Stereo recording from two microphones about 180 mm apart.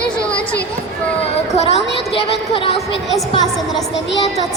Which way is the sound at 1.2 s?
35° left (ahead or behind).